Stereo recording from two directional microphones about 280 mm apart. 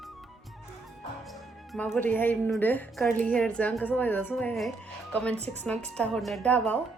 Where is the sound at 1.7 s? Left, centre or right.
Centre.